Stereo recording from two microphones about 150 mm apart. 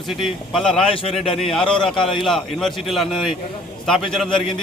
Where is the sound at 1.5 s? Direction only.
5° left (ahead or behind).